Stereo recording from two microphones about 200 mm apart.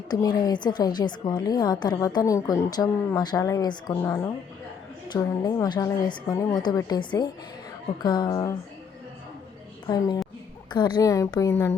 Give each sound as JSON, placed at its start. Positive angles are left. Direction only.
{"t": 0.1, "sound": "a woman's voice", "side_deg": 20}
{"t": 9.8, "sound": "a woman's voice", "side_deg": 20}